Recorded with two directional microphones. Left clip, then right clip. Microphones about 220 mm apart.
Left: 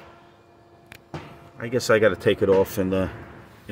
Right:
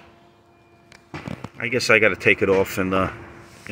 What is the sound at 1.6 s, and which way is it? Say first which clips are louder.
Speech: right 2 dB; 5° left (ahead or behind).